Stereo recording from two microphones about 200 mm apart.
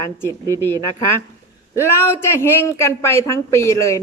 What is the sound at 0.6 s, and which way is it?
A man's voice, 10° left (ahead or behind).